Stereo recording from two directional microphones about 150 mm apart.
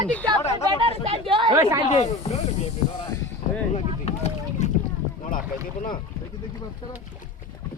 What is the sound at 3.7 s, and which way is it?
Boat, 45° left (ahead or behind).